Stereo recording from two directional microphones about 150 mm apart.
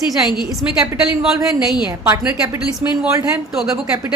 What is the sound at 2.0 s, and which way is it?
A woman's voice, 10° right (ahead or behind).